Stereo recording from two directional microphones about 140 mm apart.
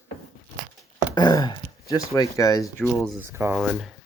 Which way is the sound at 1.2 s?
30° left (ahead or behind).